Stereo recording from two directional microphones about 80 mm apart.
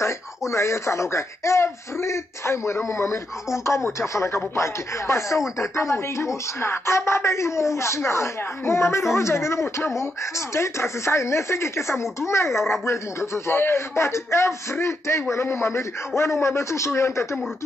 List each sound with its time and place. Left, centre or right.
0.0 s speech: left